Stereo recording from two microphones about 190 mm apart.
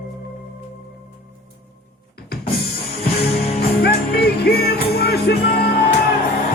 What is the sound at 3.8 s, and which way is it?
Music, 60° left (ahead or behind).